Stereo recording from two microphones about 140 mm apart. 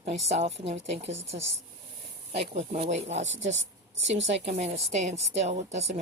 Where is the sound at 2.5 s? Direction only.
50° right (ahead or behind).